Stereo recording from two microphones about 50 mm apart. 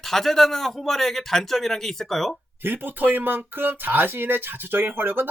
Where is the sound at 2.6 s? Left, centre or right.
Right.